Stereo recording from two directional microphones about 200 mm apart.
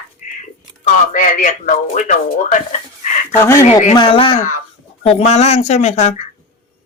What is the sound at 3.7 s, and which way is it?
Speech, 35° left (ahead or behind).